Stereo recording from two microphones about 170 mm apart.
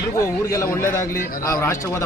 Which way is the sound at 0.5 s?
20° left (ahead or behind).